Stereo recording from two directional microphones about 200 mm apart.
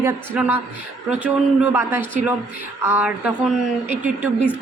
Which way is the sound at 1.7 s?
10° right (ahead or behind).